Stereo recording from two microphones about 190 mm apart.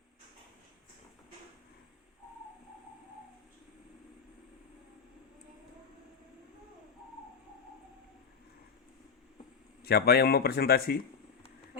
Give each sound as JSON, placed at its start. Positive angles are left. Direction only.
{"t": 9.8, "sound": "speech", "side_deg": 55}